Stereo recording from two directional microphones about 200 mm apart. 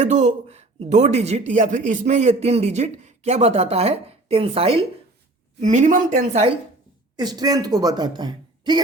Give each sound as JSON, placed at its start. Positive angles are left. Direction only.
{"t": 0.0, "sound": "a man's voice", "side_deg": -35}
{"t": 7.2, "sound": "a woman's voice", "side_deg": -20}